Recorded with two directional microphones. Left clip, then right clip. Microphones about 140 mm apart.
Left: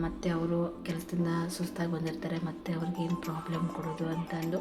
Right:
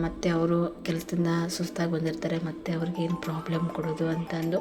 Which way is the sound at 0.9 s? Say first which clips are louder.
Right 5 dB; 30° right (ahead or behind).